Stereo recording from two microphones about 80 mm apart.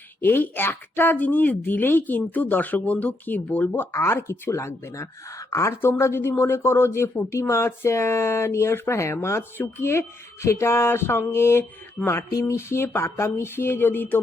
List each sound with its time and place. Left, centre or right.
0.2 s speech: left
3.9 s speech: left
12.3 s speech: left